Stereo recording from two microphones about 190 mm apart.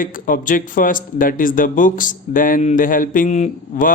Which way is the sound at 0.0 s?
45° left (ahead or behind).